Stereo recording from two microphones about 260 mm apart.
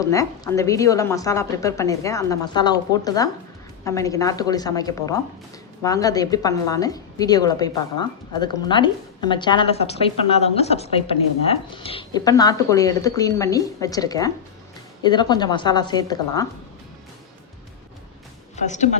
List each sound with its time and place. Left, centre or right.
0.0 s a woman's voice: centre
18.5 s a woman's voice: left